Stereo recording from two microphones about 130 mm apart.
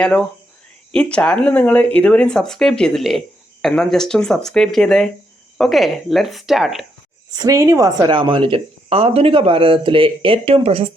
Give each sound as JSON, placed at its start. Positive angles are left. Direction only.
{"t": 0.0, "sound": "speech", "side_deg": 5}
{"t": 7.3, "sound": "speech", "side_deg": -25}